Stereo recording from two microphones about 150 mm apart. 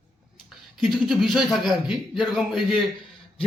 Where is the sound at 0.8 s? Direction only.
Centre (ahead or behind).